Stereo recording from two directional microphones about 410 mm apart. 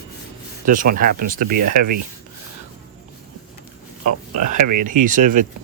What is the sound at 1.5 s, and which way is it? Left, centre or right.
Speech, right.